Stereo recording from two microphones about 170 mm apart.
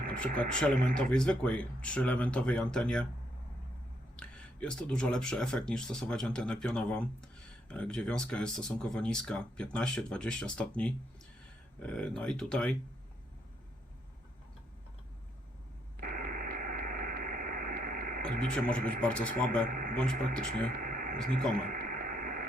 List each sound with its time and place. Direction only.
0.9 s speech: 5° left (ahead or behind)
4.2 s speech: 5° left (ahead or behind)
16.0 s radio: 60° right (ahead or behind)
18.7 s speech: 10° left (ahead or behind)
19.6 s speech: 55° right (ahead or behind)
20.0 s speech: 5° left (ahead or behind)
20.7 s a sound: 60° right (ahead or behind)
21.5 s radio: 60° right (ahead or behind)